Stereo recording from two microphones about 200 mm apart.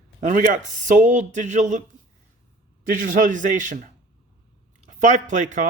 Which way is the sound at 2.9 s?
40° right (ahead or behind).